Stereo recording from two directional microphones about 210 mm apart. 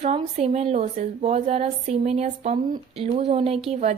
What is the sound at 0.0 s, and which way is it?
Speech, 30° right (ahead or behind).